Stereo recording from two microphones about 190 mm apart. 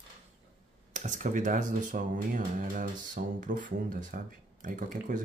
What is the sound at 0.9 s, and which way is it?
Speech, 40° right (ahead or behind).